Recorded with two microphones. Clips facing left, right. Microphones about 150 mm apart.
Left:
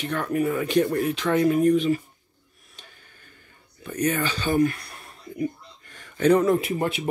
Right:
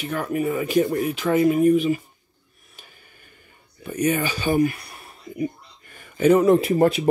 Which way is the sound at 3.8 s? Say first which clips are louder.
Right 2 dB; 10° right (ahead or behind).